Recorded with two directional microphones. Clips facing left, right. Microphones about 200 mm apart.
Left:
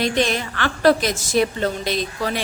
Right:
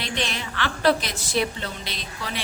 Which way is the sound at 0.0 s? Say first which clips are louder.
Left 9 dB; 45° left (ahead or behind).